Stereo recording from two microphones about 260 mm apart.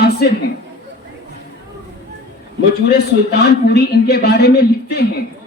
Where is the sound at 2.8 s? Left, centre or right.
Left.